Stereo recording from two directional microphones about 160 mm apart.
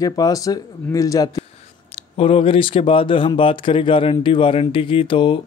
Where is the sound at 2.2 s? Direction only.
35° left (ahead or behind).